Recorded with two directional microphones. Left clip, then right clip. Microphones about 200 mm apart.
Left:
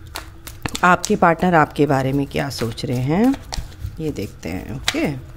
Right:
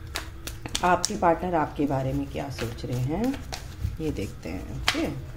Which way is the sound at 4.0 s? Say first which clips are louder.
Left 5 dB; 25° left (ahead or behind).